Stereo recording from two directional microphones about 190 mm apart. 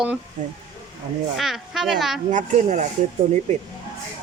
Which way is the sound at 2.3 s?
40° right (ahead or behind).